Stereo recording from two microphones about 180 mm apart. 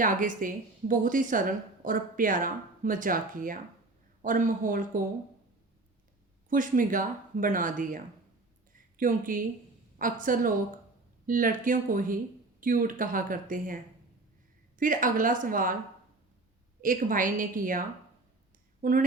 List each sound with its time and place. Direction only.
0.0 s a woman's voice: 45° right (ahead or behind)
6.5 s a woman's voice: 50° right (ahead or behind)
14.8 s a woman's voice: 50° right (ahead or behind)
16.8 s a woman's voice: 50° right (ahead or behind)